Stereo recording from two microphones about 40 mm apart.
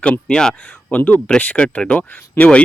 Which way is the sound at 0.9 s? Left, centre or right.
Left.